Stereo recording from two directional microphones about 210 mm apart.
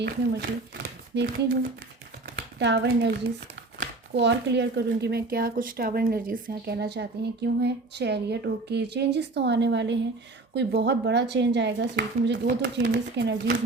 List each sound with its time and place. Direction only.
0.0 s speech: 50° right (ahead or behind)
2.6 s speech: 55° right (ahead or behind)